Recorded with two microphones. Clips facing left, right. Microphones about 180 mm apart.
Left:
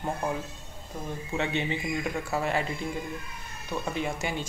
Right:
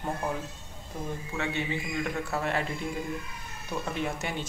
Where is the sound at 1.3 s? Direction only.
25° left (ahead or behind).